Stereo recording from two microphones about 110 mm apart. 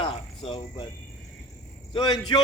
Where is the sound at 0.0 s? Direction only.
55° left (ahead or behind).